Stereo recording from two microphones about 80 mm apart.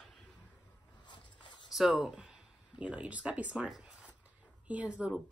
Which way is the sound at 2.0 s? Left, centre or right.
Centre.